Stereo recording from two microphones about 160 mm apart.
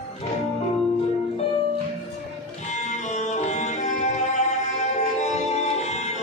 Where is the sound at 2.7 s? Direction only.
45° left (ahead or behind).